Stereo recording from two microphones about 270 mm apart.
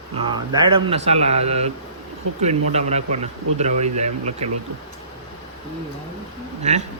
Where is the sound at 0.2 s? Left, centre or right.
Centre.